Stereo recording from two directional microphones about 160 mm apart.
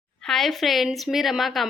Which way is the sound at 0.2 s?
5° left (ahead or behind).